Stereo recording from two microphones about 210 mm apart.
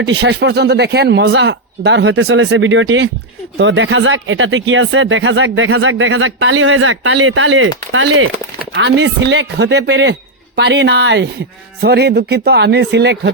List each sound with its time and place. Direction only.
0.0 s speech: 55° right (ahead or behind)